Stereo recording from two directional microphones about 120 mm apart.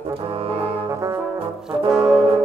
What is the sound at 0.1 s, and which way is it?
Brass instrument, 50° right (ahead or behind).